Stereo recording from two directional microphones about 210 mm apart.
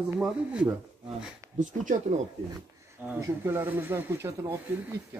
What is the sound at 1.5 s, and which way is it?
Speech, 35° right (ahead or behind).